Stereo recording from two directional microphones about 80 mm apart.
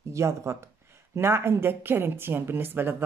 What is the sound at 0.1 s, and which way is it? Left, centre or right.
Speech, right.